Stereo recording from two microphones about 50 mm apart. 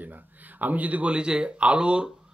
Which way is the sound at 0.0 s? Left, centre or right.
Right.